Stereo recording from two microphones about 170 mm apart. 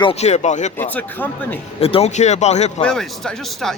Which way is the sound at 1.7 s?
35° left (ahead or behind).